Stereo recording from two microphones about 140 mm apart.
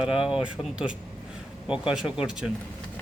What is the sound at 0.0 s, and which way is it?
Speech, 5° right (ahead or behind).